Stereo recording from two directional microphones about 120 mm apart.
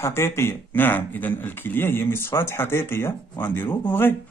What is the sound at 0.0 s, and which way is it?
A man's voice, 20° left (ahead or behind).